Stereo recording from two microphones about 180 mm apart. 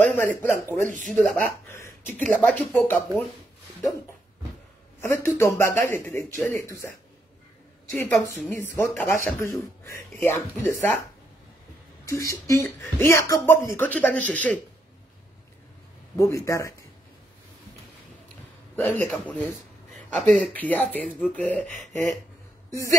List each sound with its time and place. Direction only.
0.0 s speech: 10° left (ahead or behind)
5.0 s speech: 15° left (ahead or behind)
12.1 s speech: 15° left (ahead or behind)
16.2 s speech: 15° left (ahead or behind)
20.2 s speech: centre (ahead or behind)
22.7 s a sound: 20° left (ahead or behind)